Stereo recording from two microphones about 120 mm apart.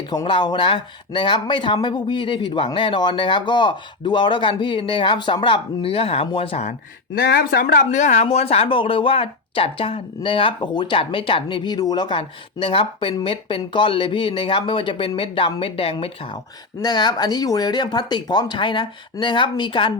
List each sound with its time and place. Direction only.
0.3 s speech: 40° left (ahead or behind)
7.9 s speech: 80° left; by 16.4 s 50° left (ahead or behind)
16.8 s speech: 35° left (ahead or behind)